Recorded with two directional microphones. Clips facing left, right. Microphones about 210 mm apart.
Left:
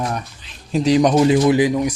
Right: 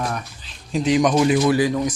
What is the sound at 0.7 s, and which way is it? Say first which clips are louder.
Speech: left 3 dB; 35° left (ahead or behind).